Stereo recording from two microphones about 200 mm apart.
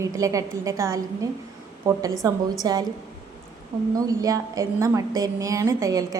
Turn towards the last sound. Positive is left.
turn(degrees=-15)  # may be behind; listen again after turning